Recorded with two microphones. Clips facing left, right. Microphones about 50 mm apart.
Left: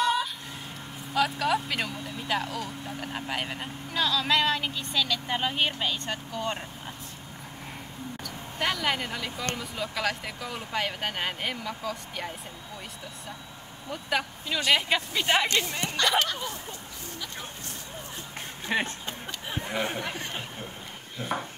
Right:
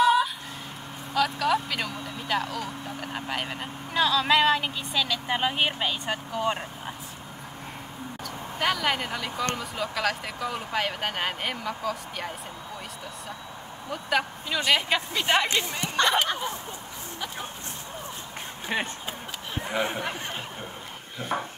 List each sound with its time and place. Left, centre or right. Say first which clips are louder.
0.0 s fowl: right 5 dB; centre
1.1 s speech: right 1 dB; centre
8.2 s speech: right 2 dB; centre
13.8 s speech: right 3 dB; centre
16.3 s speech: right 4 dB; right
18.7 s speech: left 1 dB; centre